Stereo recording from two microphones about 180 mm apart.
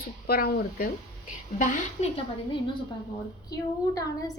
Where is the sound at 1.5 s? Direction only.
45° left (ahead or behind).